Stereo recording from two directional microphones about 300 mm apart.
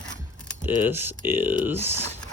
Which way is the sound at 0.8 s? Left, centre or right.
Centre.